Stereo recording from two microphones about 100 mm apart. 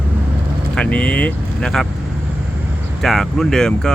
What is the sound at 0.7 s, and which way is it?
Speech, 10° left (ahead or behind).